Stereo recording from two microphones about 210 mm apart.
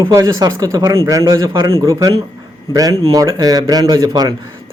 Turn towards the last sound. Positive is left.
turn(degrees=-20)  # may be behind; listen again after turning